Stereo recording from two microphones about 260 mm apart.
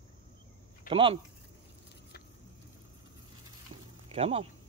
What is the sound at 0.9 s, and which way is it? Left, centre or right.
Speech, centre.